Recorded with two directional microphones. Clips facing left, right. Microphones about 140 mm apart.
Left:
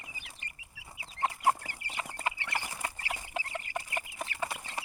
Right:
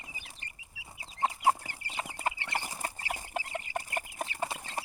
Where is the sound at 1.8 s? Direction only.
40° right (ahead or behind).